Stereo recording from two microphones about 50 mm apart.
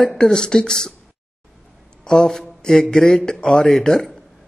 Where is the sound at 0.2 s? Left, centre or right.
Centre.